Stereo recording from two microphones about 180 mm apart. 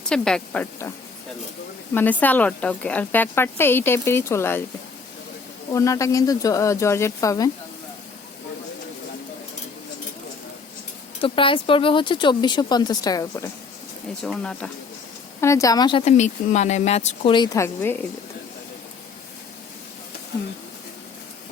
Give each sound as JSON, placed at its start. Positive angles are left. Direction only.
{"t": 0.1, "sound": "speech", "side_deg": 5}
{"t": 5.7, "sound": "speech", "side_deg": 15}
{"t": 11.2, "sound": "speech", "side_deg": 30}
{"t": 14.3, "sound": "speech", "side_deg": 5}
{"t": 15.4, "sound": "speech", "side_deg": 15}
{"t": 17.3, "sound": "speech", "side_deg": 20}